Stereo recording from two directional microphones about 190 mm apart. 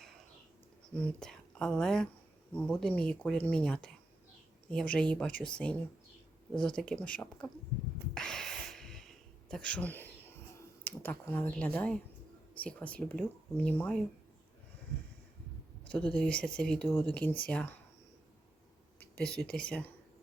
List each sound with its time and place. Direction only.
0.9 s speech: 5° left (ahead or behind)
8.1 s a sound: 5° left (ahead or behind)
10.8 s speech: 10° left (ahead or behind)
15.9 s speech: 5° left (ahead or behind)
19.5 s speech: 5° left (ahead or behind)